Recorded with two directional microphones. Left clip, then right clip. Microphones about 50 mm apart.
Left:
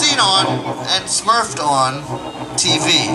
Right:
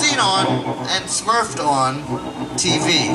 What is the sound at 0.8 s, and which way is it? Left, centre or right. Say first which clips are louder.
Speech: left 6 dB; left.